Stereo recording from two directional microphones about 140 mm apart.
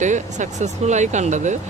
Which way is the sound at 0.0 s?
60° right (ahead or behind).